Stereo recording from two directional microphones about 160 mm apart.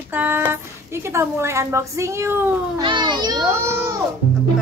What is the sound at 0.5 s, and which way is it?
Speech, 15° right (ahead or behind).